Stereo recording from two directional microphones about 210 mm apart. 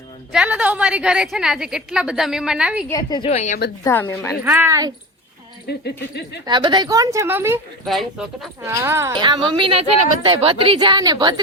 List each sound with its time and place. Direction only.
0.3 s a woman's voice: 5° right (ahead or behind)
2.9 s a woman's voice: 20° left (ahead or behind)
3.2 s a woman's voice: 35° left (ahead or behind)
4.1 s speech: 10° left (ahead or behind)
4.4 s a woman's voice: 10° right (ahead or behind)
5.6 s speech: 50° left (ahead or behind)
6.4 s a woman's voice: 20° right (ahead or behind)
7.9 s a woman's voice: centre (ahead or behind)
8.6 s a woman's voice: 10° right (ahead or behind)